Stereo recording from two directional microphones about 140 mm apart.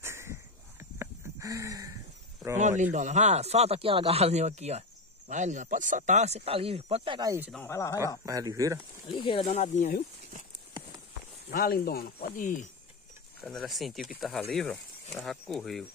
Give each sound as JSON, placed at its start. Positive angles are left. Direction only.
{"t": 0.0, "sound": "a sound", "side_deg": -20}
{"t": 2.6, "sound": "speech", "side_deg": -60}
{"t": 7.6, "sound": "speech", "side_deg": 20}
{"t": 8.3, "sound": "speech", "side_deg": -25}
{"t": 9.0, "sound": "speech", "side_deg": 35}
{"t": 9.4, "sound": "speech", "side_deg": 55}
{"t": 11.5, "sound": "speech", "side_deg": 90}
{"t": 13.5, "sound": "speech", "side_deg": 0}